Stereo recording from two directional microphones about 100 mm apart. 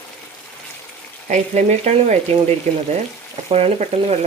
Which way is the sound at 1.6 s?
90° right.